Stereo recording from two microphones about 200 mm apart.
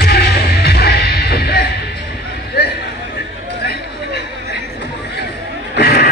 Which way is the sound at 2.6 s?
55° left (ahead or behind).